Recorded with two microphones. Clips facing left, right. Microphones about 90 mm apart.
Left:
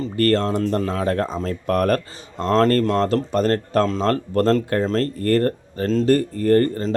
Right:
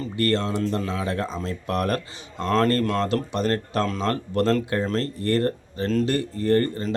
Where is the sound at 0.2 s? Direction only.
45° left (ahead or behind).